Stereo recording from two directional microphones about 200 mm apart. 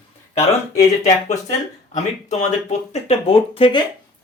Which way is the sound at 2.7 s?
30° left (ahead or behind).